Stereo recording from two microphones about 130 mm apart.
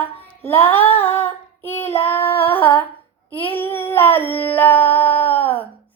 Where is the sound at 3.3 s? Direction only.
15° left (ahead or behind).